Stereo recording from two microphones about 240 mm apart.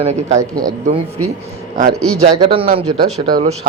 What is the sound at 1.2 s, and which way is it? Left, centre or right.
Speech, right.